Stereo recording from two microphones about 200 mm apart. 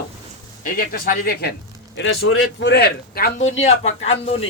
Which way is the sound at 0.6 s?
45° left (ahead or behind).